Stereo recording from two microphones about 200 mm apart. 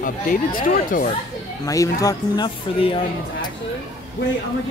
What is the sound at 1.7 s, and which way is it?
Speech, 15° left (ahead or behind).